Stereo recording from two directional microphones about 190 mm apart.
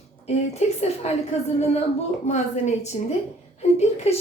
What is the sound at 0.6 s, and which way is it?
Speech, 35° left (ahead or behind).